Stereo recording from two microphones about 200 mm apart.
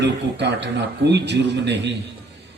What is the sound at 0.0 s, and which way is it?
A man's voice, 60° right (ahead or behind).